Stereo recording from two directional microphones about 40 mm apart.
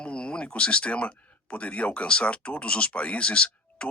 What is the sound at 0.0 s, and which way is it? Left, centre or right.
Speech, left.